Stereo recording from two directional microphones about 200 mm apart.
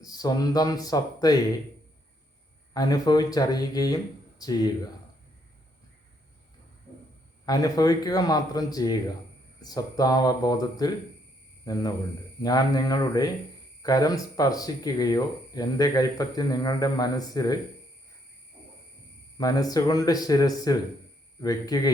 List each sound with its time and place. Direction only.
0.0 s speech: 20° left (ahead or behind)
2.7 s speech: 20° left (ahead or behind)
7.4 s speech: 20° left (ahead or behind)
19.4 s speech: 20° left (ahead or behind)